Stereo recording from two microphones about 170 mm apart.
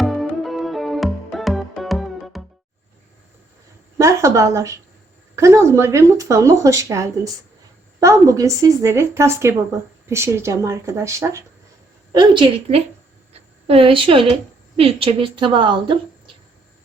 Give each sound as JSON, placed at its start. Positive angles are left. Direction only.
{"t": 0.0, "sound": "music", "side_deg": 0}
{"t": 3.9, "sound": "a woman's voice", "side_deg": -20}
{"t": 12.1, "sound": "speech", "side_deg": -30}